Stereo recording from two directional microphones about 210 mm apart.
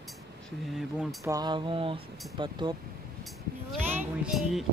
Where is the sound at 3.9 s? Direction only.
5° right (ahead or behind).